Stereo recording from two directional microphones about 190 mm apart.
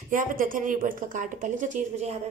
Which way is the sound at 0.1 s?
45° right (ahead or behind).